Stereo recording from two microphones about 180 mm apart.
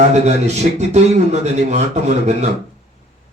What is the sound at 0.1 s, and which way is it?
A man's voice, 40° right (ahead or behind).